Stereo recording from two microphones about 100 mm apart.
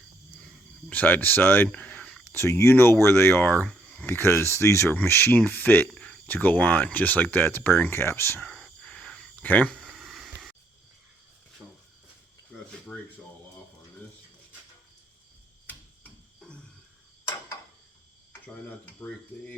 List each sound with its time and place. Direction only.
0.4 s cricket: 15° left (ahead or behind)
2.2 s speech: 25° left (ahead or behind)
8.4 s a sound: 5° left (ahead or behind)
9.3 s speech: 15° left (ahead or behind)
9.7 s a sound: centre (ahead or behind)
18.9 s speech: 15° left (ahead or behind)